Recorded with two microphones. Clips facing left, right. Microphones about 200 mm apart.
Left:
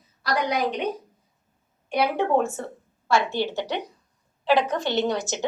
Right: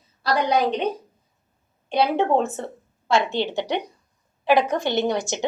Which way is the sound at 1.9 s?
25° right (ahead or behind).